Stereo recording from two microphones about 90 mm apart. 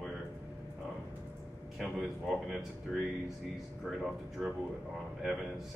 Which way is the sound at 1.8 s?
5° right (ahead or behind).